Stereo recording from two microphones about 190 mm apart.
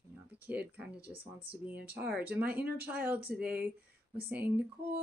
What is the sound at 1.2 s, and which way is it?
Speech, 30° right (ahead or behind).